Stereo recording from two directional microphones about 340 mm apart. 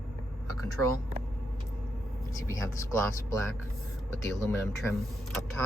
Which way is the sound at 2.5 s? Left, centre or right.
Centre.